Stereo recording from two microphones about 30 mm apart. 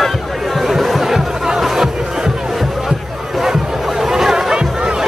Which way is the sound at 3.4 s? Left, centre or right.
Centre.